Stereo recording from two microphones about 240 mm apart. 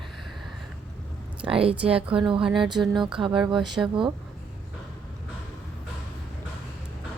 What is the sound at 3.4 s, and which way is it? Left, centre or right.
Speech, centre.